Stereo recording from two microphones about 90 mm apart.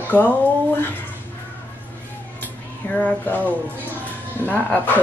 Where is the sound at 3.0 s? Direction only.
20° left (ahead or behind).